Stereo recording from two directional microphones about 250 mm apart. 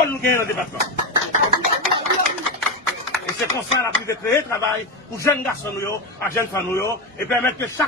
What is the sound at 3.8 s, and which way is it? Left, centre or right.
A man's voice, centre.